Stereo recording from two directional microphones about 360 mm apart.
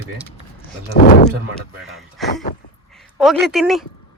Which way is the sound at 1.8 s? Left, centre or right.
Centre.